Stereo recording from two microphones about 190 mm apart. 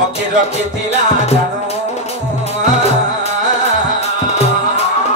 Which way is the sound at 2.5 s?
35° left (ahead or behind).